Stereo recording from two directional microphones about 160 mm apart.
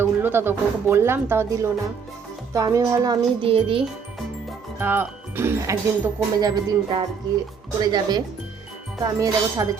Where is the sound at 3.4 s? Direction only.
35° right (ahead or behind).